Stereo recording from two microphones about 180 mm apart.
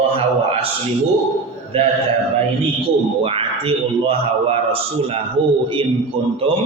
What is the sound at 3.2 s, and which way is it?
A man's voice, 30° right (ahead or behind).